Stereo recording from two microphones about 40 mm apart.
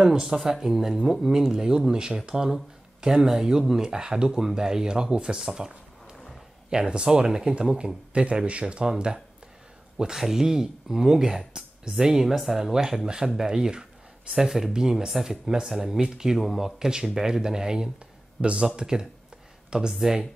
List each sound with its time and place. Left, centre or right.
0.0 s speech: centre
6.7 s speech: centre
18.4 s speech: right
19.9 s speech: centre